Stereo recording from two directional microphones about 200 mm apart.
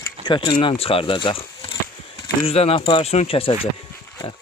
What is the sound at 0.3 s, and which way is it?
Speech, 25° left (ahead or behind).